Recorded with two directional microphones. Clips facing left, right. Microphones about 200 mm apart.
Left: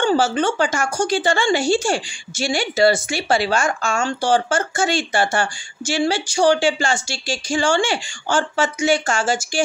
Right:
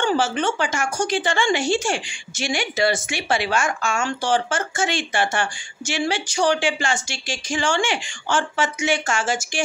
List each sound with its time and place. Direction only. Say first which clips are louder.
0.0 s speech: left 3 dB; 35° left (ahead or behind)